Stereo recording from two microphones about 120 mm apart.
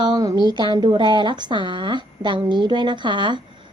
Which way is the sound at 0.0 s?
35° right (ahead or behind).